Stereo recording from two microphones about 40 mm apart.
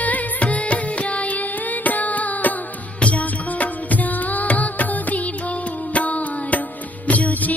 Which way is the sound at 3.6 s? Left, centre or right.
Left.